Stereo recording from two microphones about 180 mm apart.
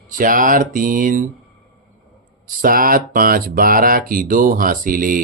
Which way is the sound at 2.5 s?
50° right (ahead or behind).